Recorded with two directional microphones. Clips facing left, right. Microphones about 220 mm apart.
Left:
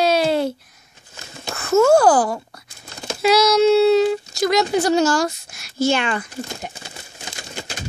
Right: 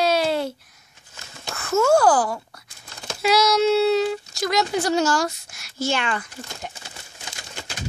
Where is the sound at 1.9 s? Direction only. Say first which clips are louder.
Left 3 dB; 15° left (ahead or behind).